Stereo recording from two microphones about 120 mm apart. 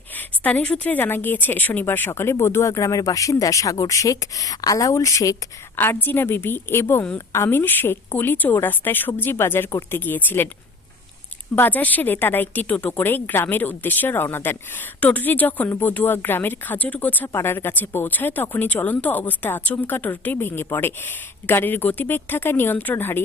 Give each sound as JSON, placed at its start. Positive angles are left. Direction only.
{"t": 0.1, "sound": "a woman's voice", "side_deg": 15}
{"t": 11.5, "sound": "a woman's voice", "side_deg": 15}